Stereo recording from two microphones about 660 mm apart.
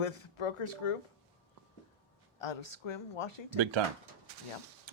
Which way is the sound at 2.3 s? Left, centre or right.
Left.